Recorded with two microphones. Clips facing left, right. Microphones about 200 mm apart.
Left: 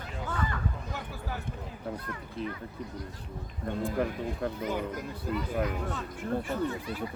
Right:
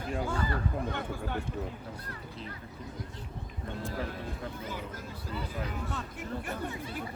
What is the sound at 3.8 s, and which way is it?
Speech, 55° left (ahead or behind).